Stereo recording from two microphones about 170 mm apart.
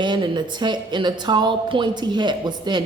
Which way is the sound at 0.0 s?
25° right (ahead or behind).